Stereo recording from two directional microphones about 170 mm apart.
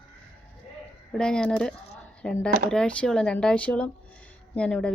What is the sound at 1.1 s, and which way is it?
Speech, 5° left (ahead or behind).